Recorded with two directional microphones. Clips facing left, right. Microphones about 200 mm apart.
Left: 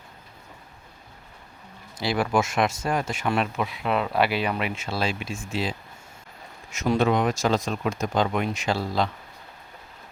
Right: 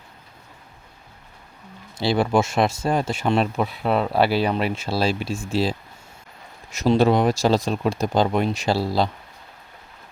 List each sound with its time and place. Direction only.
2.0 s speech: 25° right (ahead or behind)